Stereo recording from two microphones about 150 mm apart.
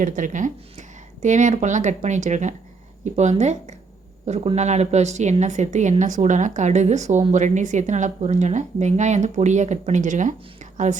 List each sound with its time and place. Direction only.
0.0 s a woman's voice: 60° right (ahead or behind)